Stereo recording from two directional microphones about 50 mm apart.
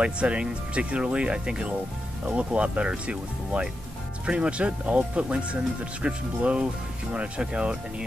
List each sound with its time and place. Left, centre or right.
0.0 s speech: right